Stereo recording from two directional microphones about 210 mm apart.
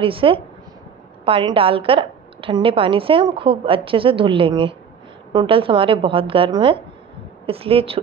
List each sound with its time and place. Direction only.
0.0 s a woman's voice: 25° right (ahead or behind)